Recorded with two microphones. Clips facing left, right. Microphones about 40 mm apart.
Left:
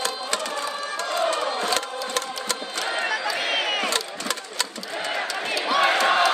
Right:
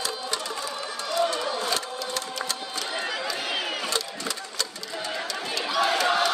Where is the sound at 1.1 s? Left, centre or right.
Left.